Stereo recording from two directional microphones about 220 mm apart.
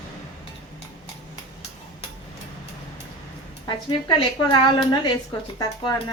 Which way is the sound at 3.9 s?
20° left (ahead or behind).